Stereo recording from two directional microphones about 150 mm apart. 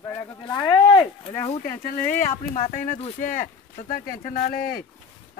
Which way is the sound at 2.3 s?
50° left (ahead or behind).